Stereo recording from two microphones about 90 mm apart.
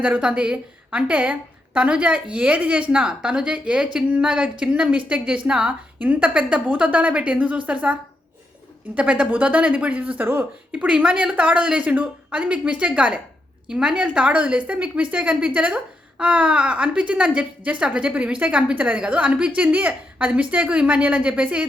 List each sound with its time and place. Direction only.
0.0 s a woman's voice: 10° right (ahead or behind)
9.0 s a woman's voice: 15° right (ahead or behind)